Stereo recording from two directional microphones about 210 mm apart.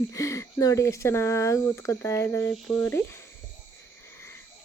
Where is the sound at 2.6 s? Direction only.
5° left (ahead or behind).